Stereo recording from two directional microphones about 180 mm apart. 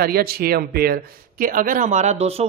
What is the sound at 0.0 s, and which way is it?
Speech, 60° right (ahead or behind).